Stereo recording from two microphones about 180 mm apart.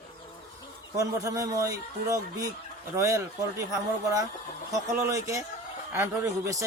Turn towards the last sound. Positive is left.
turn(degrees=-15)  # may be behind; listen again after turning